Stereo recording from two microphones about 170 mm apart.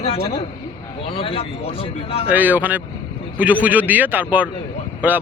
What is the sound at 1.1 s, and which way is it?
A man's voice, 30° left (ahead or behind).